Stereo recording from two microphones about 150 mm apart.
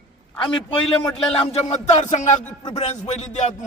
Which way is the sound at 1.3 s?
45° left (ahead or behind).